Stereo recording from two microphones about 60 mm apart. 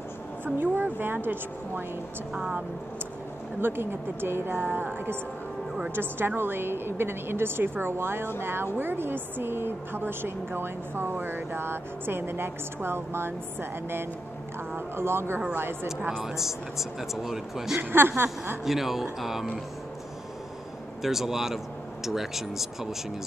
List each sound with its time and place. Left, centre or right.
0.6 s a woman's voice: right
2.3 s speech: centre
3.6 s a woman's voice: right
16.3 s speech: centre
17.7 s a woman's voice: right
18.6 s speech: centre
21.0 s speech: centre